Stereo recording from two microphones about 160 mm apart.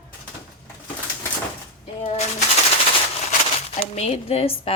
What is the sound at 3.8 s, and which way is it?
Speech, 40° left (ahead or behind).